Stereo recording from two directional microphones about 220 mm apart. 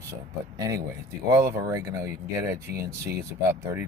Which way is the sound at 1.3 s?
15° right (ahead or behind).